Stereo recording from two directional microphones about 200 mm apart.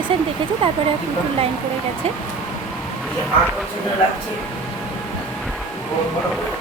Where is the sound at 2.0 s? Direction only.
30° right (ahead or behind).